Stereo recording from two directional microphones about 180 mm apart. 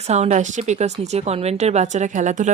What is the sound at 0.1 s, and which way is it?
Speech, 35° right (ahead or behind).